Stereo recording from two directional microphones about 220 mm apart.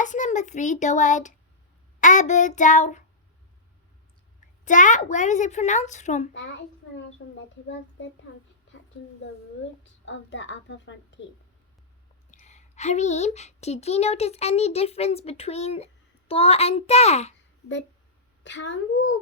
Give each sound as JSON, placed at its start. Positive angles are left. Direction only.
{"t": 0.0, "sound": "a child's voice", "side_deg": 35}
{"t": 4.6, "sound": "a child's voice", "side_deg": 35}
{"t": 6.3, "sound": "a woman's voice", "side_deg": 55}
{"t": 9.8, "sound": "a woman's voice", "side_deg": 55}
{"t": 12.3, "sound": "speech", "side_deg": 30}
{"t": 18.4, "sound": "a woman's voice", "side_deg": 55}